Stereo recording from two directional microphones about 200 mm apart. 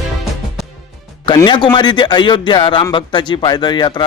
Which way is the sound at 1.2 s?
25° left (ahead or behind).